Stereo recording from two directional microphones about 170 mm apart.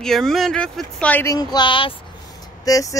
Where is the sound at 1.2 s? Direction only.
20° left (ahead or behind).